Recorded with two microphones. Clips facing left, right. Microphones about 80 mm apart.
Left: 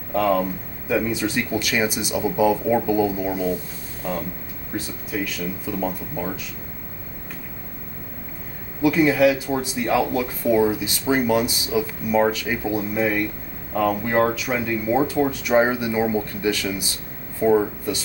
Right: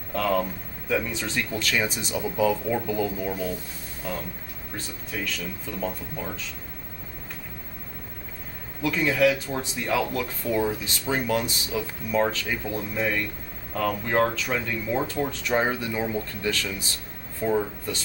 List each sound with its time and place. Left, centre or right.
0.1 s speech: centre
8.8 s speech: centre